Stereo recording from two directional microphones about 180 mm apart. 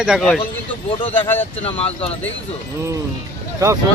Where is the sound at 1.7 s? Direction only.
5° left (ahead or behind).